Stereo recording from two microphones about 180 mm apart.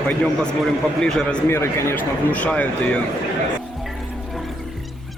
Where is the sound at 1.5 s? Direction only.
15° left (ahead or behind).